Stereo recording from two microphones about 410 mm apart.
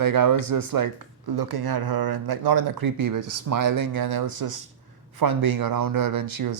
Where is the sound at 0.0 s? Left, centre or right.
Right.